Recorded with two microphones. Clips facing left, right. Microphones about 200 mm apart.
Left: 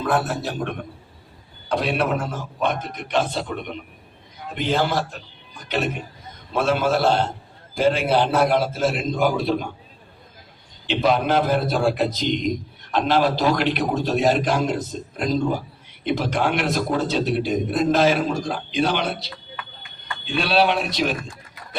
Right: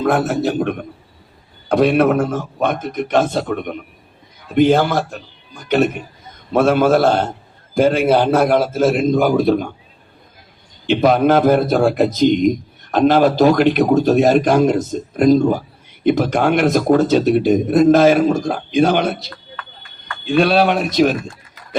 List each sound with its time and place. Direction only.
0.1 s a man's voice: 45° right (ahead or behind)
1.7 s a man's voice: 50° right (ahead or behind)
10.8 s a man's voice: 50° right (ahead or behind)